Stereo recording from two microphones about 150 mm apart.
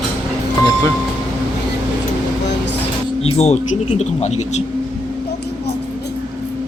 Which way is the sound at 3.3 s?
45° left (ahead or behind).